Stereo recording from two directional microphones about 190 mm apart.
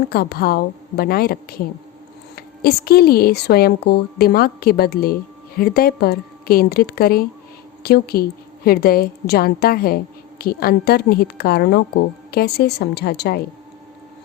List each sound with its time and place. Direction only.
0.1 s a woman's voice: 55° left (ahead or behind)